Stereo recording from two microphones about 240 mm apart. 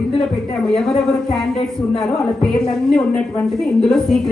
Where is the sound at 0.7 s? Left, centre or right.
Centre.